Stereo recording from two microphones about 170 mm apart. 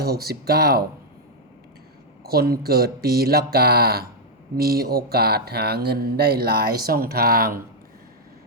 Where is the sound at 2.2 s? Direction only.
65° right (ahead or behind).